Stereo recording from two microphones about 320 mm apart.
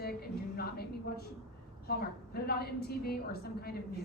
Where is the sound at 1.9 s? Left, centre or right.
Left.